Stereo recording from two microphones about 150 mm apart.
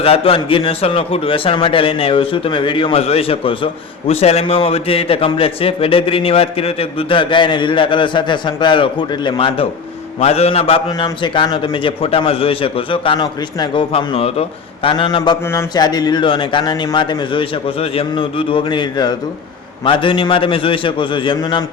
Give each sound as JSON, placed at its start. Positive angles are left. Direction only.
{"t": 0.0, "sound": "a man's voice", "side_deg": 40}